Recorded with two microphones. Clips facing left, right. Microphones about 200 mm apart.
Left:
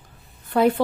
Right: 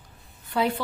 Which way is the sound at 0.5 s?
50° left (ahead or behind).